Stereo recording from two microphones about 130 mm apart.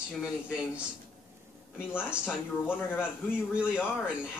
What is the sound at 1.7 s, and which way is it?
A man's voice, 5° right (ahead or behind).